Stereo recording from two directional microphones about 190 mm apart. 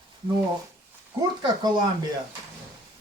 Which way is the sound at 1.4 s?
25° right (ahead or behind).